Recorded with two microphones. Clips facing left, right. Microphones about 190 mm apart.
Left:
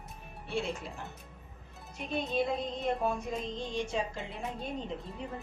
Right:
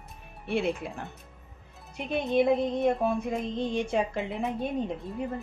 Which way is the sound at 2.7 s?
60° right (ahead or behind).